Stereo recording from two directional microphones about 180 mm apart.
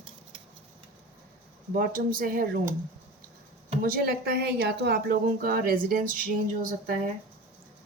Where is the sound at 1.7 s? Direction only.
50° right (ahead or behind).